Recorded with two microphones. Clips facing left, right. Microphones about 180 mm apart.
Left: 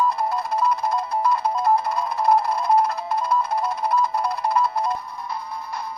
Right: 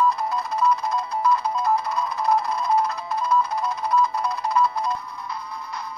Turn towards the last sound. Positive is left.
turn(degrees=55)  # may be behind; listen again after turning